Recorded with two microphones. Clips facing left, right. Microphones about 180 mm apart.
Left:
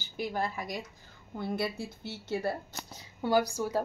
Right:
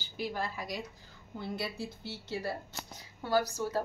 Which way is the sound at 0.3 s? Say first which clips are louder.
Left 5 dB; 50° left (ahead or behind).